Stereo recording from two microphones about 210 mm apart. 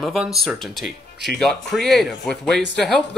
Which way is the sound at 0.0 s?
Centre (ahead or behind).